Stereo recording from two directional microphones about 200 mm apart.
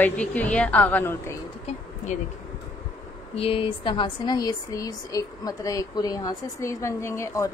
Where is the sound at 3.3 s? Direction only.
30° left (ahead or behind).